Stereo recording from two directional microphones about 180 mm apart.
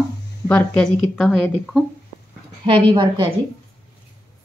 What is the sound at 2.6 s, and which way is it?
Speech, 30° right (ahead or behind).